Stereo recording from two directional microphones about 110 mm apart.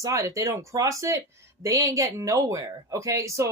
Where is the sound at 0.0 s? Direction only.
30° right (ahead or behind).